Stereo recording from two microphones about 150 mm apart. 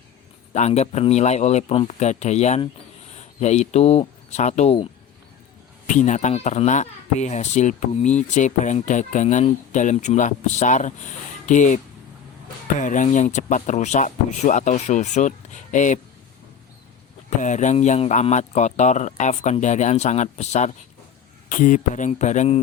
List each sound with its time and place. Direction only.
0.5 s speech: 45° left (ahead or behind)
5.9 s speech: 55° left (ahead or behind)
17.2 s speech: 55° left (ahead or behind)
21.5 s speech: 60° left (ahead or behind)